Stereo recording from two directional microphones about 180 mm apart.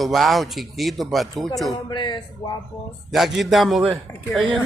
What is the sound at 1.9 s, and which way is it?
Speech, 25° left (ahead or behind).